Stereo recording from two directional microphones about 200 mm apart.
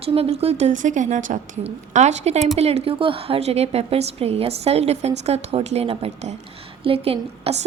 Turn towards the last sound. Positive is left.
turn(degrees=-30)  # may be behind; listen again after turning